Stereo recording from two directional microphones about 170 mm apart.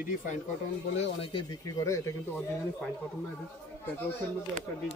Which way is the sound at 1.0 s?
30° left (ahead or behind).